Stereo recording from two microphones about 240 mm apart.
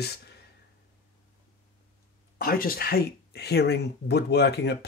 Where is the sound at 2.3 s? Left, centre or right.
Left.